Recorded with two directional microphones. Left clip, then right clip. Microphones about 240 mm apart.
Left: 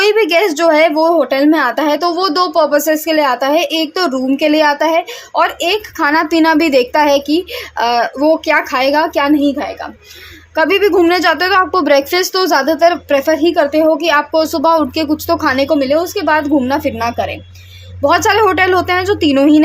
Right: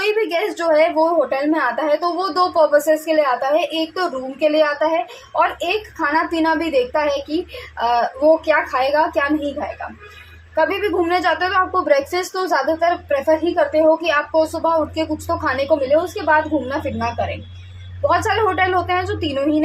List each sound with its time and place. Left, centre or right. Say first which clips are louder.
0.0 s a woman's voice: left 8 dB; left
10.5 s a woman's voice: left 7 dB; left